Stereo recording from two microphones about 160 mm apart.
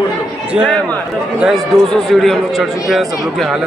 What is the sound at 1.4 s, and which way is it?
Speech, centre (ahead or behind).